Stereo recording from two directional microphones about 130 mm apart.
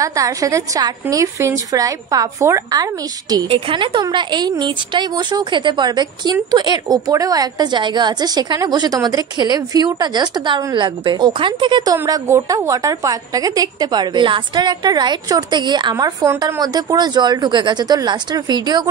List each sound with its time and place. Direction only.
0.0 s a woman's voice: 25° right (ahead or behind)
3.4 s a woman's voice: 45° right (ahead or behind)